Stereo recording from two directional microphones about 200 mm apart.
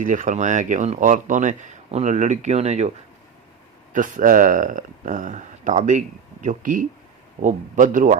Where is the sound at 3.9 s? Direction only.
40° right (ahead or behind).